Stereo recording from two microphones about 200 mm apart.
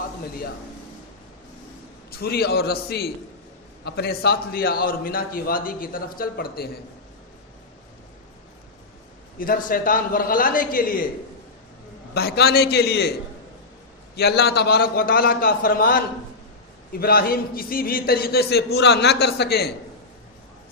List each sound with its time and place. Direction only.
2.0 s a man's voice: 50° left (ahead or behind)
9.4 s a man's voice: 45° left (ahead or behind)
12.1 s a man's voice: 55° left (ahead or behind)
14.2 s a man's voice: 55° left (ahead or behind)